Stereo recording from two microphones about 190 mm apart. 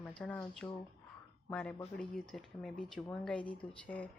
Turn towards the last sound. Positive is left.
turn(degrees=10)  # may be behind; listen again after turning